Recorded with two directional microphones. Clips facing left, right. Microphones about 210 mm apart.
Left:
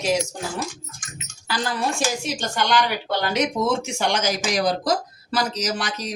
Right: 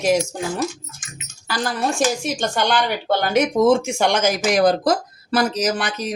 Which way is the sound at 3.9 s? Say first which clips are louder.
Right 4 dB; 55° right (ahead or behind).